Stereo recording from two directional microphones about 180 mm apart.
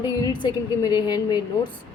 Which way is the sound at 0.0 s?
25° left (ahead or behind).